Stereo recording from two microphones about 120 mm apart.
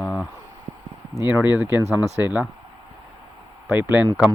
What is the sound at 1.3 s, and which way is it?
Speech, 15° right (ahead or behind).